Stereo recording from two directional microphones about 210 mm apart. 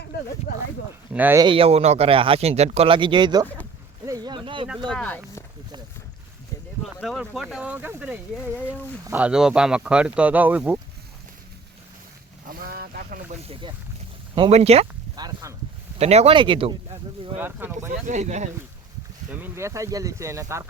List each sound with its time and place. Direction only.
0.5 s speech: 50° left (ahead or behind)
1.1 s speech: 10° right (ahead or behind)
1.5 s speech: 25° right (ahead or behind)
4.9 s speech: 5° left (ahead or behind)
6.8 s speech: centre (ahead or behind)
12.5 s vehicle: 45° right (ahead or behind)
13.4 s speech: 25° right (ahead or behind)
16.0 s speech: 30° right (ahead or behind)
17.3 s speech: 10° right (ahead or behind)
18.0 s speech: 35° right (ahead or behind)
19.3 s speech: 10° right (ahead or behind)